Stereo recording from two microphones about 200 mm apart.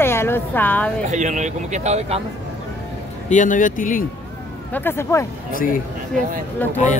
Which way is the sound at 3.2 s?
40° left (ahead or behind).